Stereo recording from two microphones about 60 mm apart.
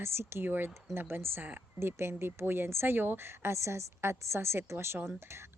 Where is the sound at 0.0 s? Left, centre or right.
Right.